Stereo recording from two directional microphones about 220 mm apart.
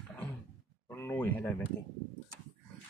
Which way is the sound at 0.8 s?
10° left (ahead or behind).